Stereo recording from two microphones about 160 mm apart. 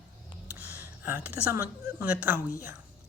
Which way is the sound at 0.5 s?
10° right (ahead or behind).